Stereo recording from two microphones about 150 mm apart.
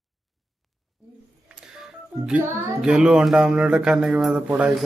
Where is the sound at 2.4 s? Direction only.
15° right (ahead or behind).